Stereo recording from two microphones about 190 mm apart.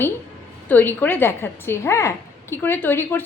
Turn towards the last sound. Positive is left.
turn(degrees=10)  # may be behind; listen again after turning